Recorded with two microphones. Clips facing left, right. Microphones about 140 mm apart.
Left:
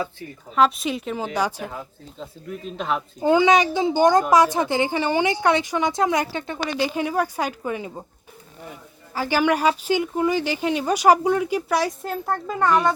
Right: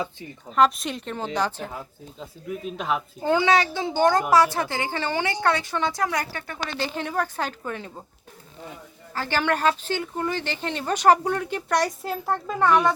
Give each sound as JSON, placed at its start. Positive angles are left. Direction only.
{"t": 0.5, "sound": "speech", "side_deg": 0}
{"t": 2.5, "sound": "speech", "side_deg": -5}
{"t": 3.2, "sound": "speech", "side_deg": 15}
{"t": 9.1, "sound": "speech", "side_deg": 10}